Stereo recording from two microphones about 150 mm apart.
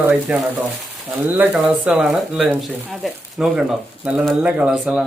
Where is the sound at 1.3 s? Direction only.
5° right (ahead or behind).